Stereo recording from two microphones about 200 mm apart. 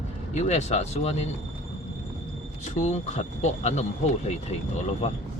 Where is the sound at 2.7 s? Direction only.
35° left (ahead or behind).